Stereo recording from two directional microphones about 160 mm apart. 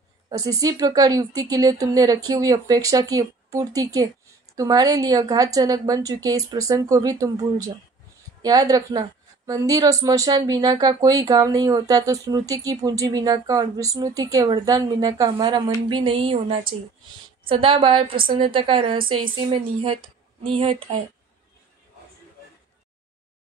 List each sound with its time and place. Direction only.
0.3 s a woman's voice: 20° right (ahead or behind)